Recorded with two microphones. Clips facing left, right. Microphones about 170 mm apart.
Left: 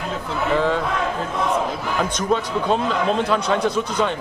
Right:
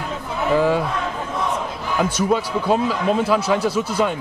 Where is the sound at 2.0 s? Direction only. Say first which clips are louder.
Right 2 dB; 10° right (ahead or behind).